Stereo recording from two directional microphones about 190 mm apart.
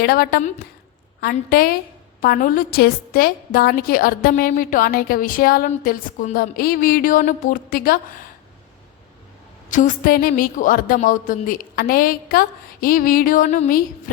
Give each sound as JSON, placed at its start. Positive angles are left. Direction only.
{"t": 0.0, "sound": "a woman's voice", "side_deg": 50}
{"t": 9.6, "sound": "a woman's voice", "side_deg": 45}